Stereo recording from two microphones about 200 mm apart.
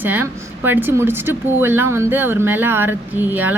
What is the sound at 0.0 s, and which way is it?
A woman's voice, 10° right (ahead or behind).